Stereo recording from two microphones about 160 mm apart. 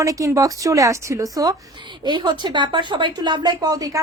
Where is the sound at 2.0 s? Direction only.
30° right (ahead or behind).